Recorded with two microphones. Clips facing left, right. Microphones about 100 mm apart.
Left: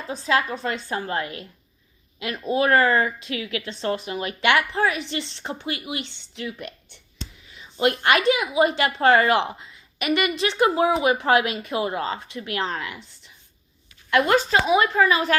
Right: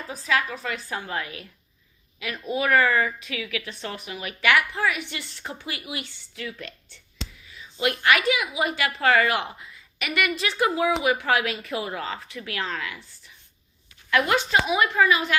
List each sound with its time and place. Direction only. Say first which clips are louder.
0.1 s speech: left 3 dB; 30° left (ahead or behind)
2.2 s a woman's voice: left 4 dB; 30° left (ahead or behind)
14.2 s speech: left 3 dB; 35° left (ahead or behind)